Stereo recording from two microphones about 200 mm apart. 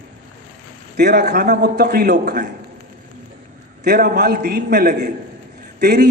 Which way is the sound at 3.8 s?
50° right (ahead or behind).